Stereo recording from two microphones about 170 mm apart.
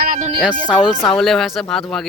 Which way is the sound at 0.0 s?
55° right (ahead or behind).